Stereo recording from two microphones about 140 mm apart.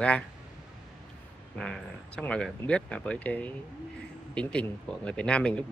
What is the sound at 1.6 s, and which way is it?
Speech, 5° left (ahead or behind).